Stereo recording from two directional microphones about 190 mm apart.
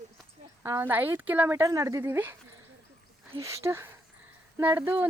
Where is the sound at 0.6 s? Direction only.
15° right (ahead or behind).